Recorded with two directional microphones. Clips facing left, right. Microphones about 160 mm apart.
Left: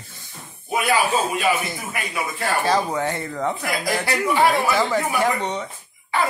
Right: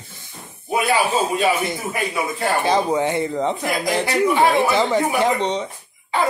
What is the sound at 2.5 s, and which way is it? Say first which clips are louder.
Speech: right 2 dB; 20° right (ahead or behind).